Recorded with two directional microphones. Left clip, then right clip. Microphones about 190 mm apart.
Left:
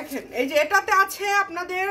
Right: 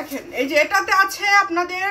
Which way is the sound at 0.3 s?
55° left (ahead or behind).